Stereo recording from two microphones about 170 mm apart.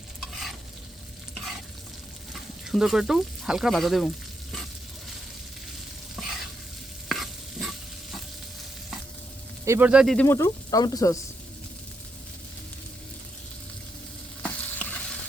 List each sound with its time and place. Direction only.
2.3 s speech: centre (ahead or behind)
7.1 s stir: centre (ahead or behind)
9.6 s speech: 10° right (ahead or behind)
10.2 s speech: 15° left (ahead or behind)
14.4 s stir: 10° left (ahead or behind)